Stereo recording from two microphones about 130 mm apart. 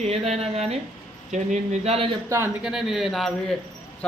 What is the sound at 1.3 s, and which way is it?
Speech, 65° right (ahead or behind).